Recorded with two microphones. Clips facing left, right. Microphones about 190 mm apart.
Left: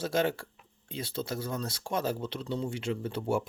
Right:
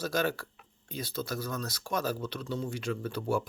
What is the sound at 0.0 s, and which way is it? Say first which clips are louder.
Speech: left 2 dB; 25° left (ahead or behind).